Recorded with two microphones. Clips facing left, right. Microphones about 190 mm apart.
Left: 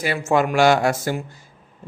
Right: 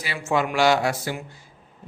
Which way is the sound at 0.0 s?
50° left (ahead or behind).